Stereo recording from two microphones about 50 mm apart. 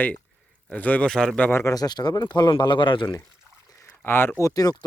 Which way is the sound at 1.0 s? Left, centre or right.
Centre.